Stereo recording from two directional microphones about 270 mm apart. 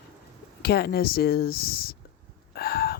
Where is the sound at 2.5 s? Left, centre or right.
Left.